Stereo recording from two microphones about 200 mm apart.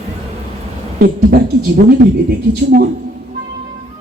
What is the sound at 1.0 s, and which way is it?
Speech, 50° right (ahead or behind).